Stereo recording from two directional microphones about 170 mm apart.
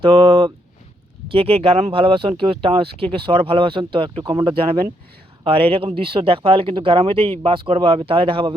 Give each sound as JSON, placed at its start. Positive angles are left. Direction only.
{"t": 0.0, "sound": "speech", "side_deg": -30}